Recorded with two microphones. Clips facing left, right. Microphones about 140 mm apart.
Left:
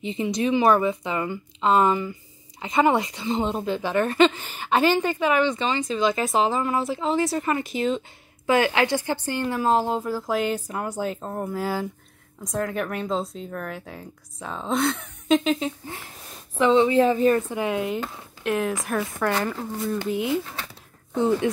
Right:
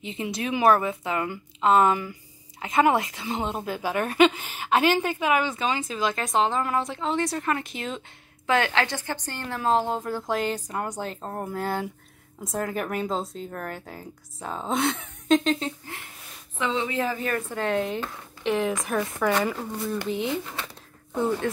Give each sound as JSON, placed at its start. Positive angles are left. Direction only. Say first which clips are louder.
{"t": 0.0, "sound": "speech", "louder": "left 6 dB", "side_deg": 0}
{"t": 16.5, "sound": "a woman's voice", "louder": "left 9 dB", "side_deg": 30}
{"t": 17.6, "sound": "speech", "louder": "left 1 dB", "side_deg": 10}